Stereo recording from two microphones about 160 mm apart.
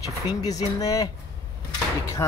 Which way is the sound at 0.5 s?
25° left (ahead or behind).